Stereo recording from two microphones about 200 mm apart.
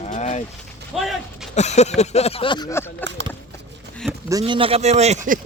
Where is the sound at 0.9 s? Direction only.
Centre (ahead or behind).